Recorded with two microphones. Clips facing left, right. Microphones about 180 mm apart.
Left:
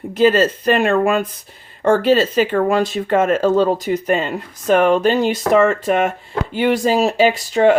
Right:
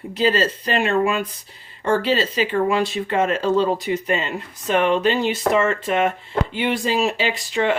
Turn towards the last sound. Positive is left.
turn(degrees=40)  # may be behind; listen again after turning